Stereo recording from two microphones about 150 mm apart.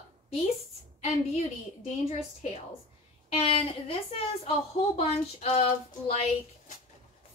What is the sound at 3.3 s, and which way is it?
A woman's voice, 40° left (ahead or behind).